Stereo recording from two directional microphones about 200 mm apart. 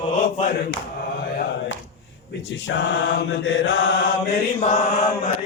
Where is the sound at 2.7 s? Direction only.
65° left (ahead or behind).